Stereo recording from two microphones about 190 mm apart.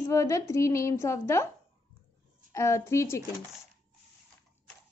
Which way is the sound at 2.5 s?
15° left (ahead or behind).